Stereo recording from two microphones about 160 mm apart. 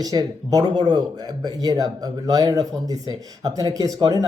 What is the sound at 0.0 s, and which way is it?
A man's voice, 25° right (ahead or behind).